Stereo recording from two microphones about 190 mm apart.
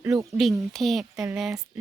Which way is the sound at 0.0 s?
15° right (ahead or behind).